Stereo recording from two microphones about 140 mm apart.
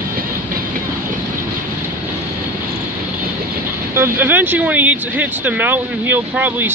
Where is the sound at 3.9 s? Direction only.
15° right (ahead or behind).